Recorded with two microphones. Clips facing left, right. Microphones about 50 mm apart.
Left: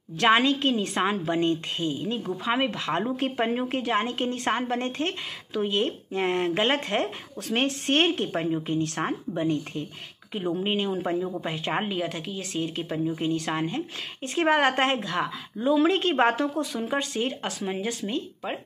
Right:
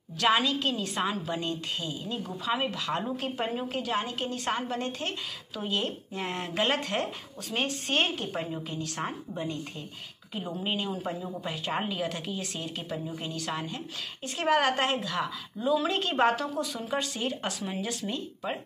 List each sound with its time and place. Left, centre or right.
0.2 s a woman's voice: left
7.4 s a woman's voice: left
8.6 s a woman's voice: left
9.4 s speech: left
10.3 s a woman's voice: left
12.0 s a woman's voice: centre
12.6 s speech: left
17.4 s a woman's voice: centre
17.6 s a woman's voice: centre